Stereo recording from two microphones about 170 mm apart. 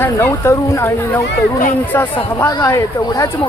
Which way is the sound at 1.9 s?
10° left (ahead or behind).